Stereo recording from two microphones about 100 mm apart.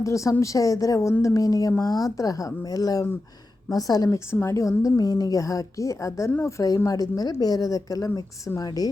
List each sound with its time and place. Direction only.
0.0 s a woman's voice: 30° left (ahead or behind)
4.3 s a woman's voice: 25° left (ahead or behind)